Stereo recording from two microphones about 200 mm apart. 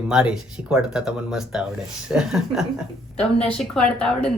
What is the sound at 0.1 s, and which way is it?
Speech, 5° right (ahead or behind).